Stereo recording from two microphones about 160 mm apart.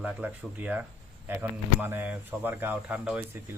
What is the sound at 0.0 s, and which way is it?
Speech, 10° right (ahead or behind).